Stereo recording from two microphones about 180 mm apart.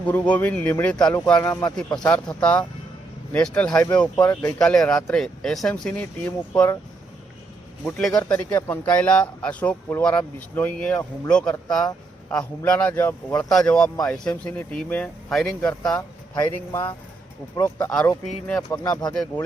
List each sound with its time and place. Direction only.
0.0 s speech: 10° left (ahead or behind)
2.0 s speech: 5° left (ahead or behind)
4.2 s speech: 20° left (ahead or behind)
7.9 s speech: 5° left (ahead or behind)
18.8 s speech: 20° left (ahead or behind)